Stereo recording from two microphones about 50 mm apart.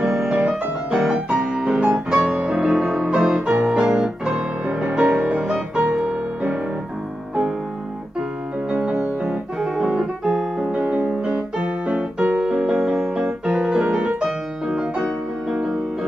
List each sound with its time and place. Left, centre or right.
0.0 s music: centre
1.0 s music: centre
4.8 s music: right
8.6 s music: right
9.2 s piano: centre
10.7 s keyboard: right
15.5 s music: centre